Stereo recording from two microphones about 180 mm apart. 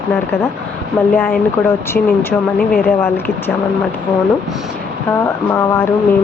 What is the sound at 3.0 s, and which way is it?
Speech, 15° left (ahead or behind).